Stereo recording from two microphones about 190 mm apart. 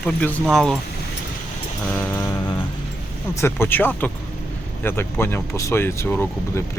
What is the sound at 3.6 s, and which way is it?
Speech, 10° left (ahead or behind).